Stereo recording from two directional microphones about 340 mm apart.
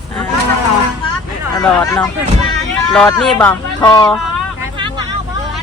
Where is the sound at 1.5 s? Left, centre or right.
Centre.